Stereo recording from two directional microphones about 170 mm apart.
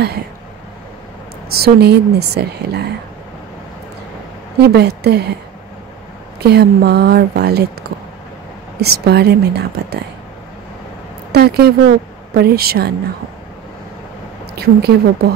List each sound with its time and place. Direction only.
1.6 s a woman's voice: 75° right (ahead or behind)
4.6 s a woman's voice: 70° right (ahead or behind)
6.4 s a woman's voice: 70° right (ahead or behind)
8.8 s a woman's voice: 70° right (ahead or behind)
11.3 s a woman's voice: 70° right (ahead or behind)
14.5 s a woman's voice: 70° right (ahead or behind)